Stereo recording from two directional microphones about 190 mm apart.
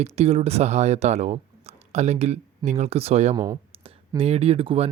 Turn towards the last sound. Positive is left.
turn(degrees=-30)  # may be behind; listen again after turning